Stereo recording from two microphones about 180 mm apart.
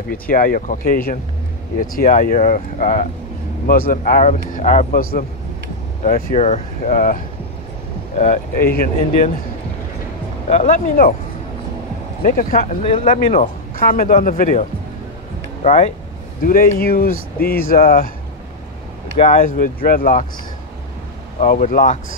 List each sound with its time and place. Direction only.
0.1 s speech: 50° left (ahead or behind)
8.2 s speech: 40° left (ahead or behind)
8.6 s speech: 55° left (ahead or behind)
10.5 s speech: 40° left (ahead or behind)
12.2 s speech: 50° left (ahead or behind)
16.4 s speech: 55° left (ahead or behind)
19.1 s speech: 35° left (ahead or behind)
19.4 s speech: 50° left (ahead or behind)
21.4 s speech: 45° left (ahead or behind)